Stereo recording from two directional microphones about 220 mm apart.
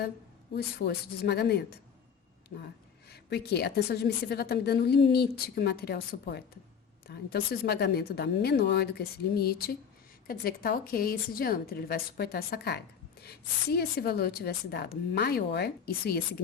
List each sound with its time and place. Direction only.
0.5 s a woman's voice: 45° left (ahead or behind)
3.1 s a woman's voice: 50° left (ahead or behind)